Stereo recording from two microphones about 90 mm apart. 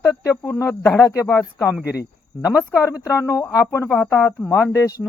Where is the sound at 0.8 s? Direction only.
15° left (ahead or behind).